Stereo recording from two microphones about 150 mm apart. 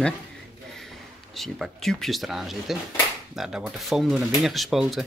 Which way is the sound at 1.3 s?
Centre (ahead or behind).